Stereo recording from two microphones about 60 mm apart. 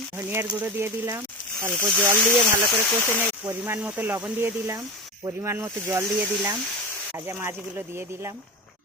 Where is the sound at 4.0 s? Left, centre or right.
Right.